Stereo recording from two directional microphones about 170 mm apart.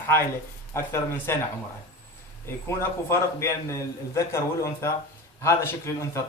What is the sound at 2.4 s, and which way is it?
Speech, 15° left (ahead or behind).